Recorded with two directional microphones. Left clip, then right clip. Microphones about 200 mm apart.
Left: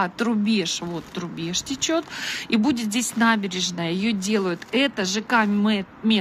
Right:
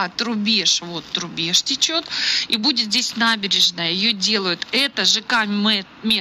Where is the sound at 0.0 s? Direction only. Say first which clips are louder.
Right 2 dB; 10° left (ahead or behind).